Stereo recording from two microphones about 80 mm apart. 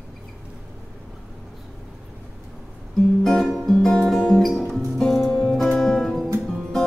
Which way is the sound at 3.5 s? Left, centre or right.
Centre.